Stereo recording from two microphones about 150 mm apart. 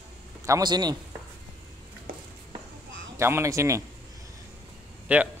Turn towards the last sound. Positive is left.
turn(degrees=-10)  # may be behind; listen again after turning